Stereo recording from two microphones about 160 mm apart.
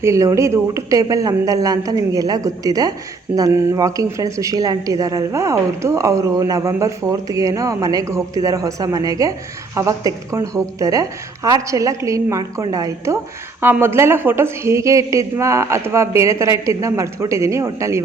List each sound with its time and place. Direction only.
0.0 s a woman's voice: 20° right (ahead or behind)